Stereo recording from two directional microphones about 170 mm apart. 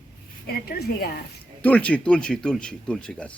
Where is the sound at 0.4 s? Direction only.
70° left (ahead or behind).